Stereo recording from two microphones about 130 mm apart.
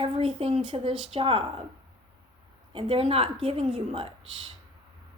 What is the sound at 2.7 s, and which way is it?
Speech, 45° right (ahead or behind).